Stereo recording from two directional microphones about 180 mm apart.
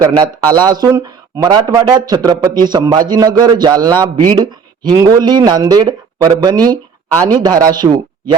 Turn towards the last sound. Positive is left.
turn(degrees=-20)  # may be behind; listen again after turning